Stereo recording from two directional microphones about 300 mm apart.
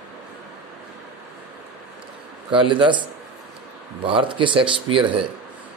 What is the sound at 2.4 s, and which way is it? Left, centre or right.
Speech, centre.